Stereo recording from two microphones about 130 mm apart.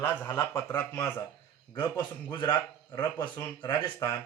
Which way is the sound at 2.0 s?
35° left (ahead or behind).